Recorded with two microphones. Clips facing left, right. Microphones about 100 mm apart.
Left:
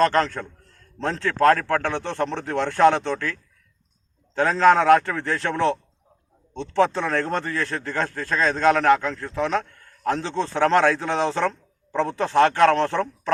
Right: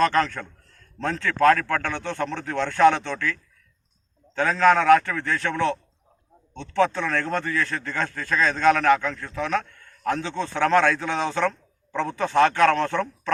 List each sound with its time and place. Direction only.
0.1 s a man's voice: 25° left (ahead or behind)
4.4 s a man's voice: 25° left (ahead or behind)